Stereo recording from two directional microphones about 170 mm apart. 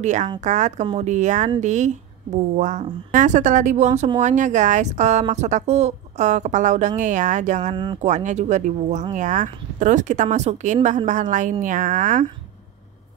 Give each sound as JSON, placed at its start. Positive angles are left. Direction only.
{"t": 0.0, "sound": "speech", "side_deg": -45}
{"t": 7.7, "sound": "speech", "side_deg": -30}
{"t": 8.0, "sound": "speech", "side_deg": -45}